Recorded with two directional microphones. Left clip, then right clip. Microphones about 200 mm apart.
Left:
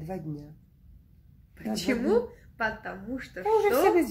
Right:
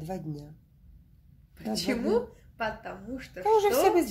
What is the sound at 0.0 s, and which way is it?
Speech, 20° right (ahead or behind).